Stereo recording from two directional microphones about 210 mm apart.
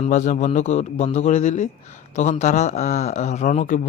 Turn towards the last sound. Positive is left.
turn(degrees=35)  # may be behind; listen again after turning